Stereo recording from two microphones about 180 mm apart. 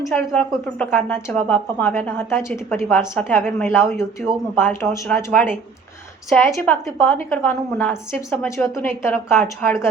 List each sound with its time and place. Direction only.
0.3 s a woman's voice: 10° left (ahead or behind)
6.6 s a woman's voice: 10° left (ahead or behind)